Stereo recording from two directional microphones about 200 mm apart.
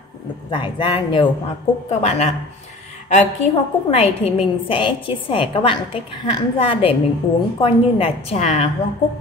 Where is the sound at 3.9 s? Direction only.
30° left (ahead or behind).